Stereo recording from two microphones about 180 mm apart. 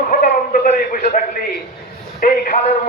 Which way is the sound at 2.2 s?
50° left (ahead or behind).